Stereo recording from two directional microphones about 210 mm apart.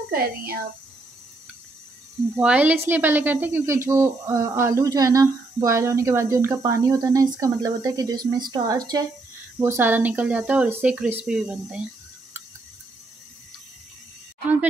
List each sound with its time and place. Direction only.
0.1 s speech: 45° right (ahead or behind)
2.3 s speech: 10° right (ahead or behind)